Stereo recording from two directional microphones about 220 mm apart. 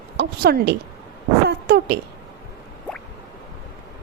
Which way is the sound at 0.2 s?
50° right (ahead or behind).